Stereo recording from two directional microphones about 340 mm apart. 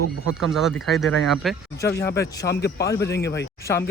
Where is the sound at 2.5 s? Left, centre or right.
Left.